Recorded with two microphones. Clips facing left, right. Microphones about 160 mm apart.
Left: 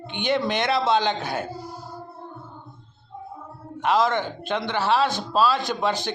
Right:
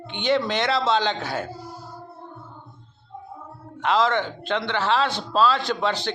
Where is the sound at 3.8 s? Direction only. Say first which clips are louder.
Even; 15° left (ahead or behind).